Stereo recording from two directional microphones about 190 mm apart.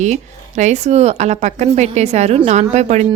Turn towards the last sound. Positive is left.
turn(degrees=-35)  # may be behind; listen again after turning